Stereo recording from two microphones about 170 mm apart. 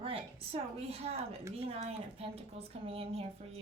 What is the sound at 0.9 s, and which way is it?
Speech, 35° right (ahead or behind).